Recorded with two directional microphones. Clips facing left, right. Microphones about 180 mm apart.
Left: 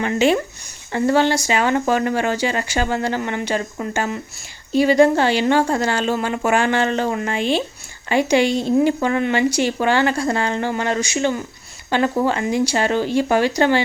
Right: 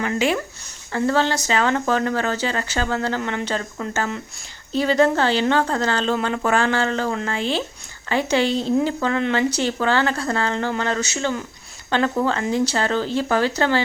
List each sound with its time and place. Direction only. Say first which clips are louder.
0.0 s speech: left 4 dB; 25° left (ahead or behind)